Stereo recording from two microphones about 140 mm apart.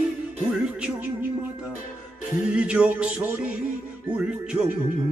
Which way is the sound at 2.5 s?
10° right (ahead or behind).